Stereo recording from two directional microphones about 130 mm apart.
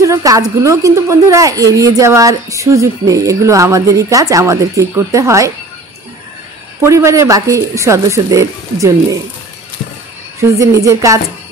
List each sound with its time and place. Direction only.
0.0 s a woman's voice: 25° right (ahead or behind)
6.8 s a woman's voice: 20° right (ahead or behind)
10.4 s a woman's voice: 25° right (ahead or behind)